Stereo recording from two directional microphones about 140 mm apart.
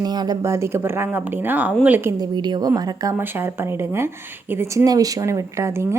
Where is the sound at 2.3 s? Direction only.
30° right (ahead or behind).